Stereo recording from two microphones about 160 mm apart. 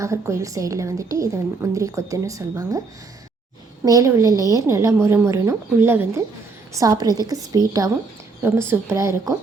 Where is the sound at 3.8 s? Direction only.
20° right (ahead or behind).